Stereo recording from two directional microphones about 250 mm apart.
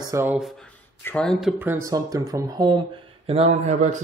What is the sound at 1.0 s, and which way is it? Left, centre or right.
Speech, centre.